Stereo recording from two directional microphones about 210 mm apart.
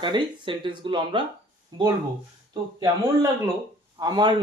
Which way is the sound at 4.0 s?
20° right (ahead or behind).